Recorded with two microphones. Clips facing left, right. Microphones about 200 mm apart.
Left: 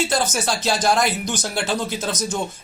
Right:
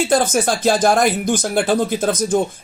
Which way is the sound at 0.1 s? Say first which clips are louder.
Right 6 dB; 55° right (ahead or behind).